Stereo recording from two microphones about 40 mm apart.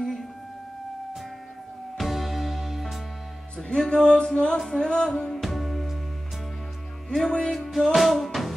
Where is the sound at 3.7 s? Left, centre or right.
Centre.